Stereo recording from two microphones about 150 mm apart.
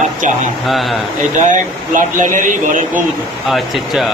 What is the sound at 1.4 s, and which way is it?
Speech, 60° right (ahead or behind).